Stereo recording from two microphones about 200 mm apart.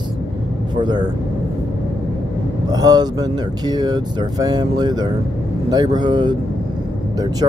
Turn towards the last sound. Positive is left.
turn(degrees=-20)  # may be behind; listen again after turning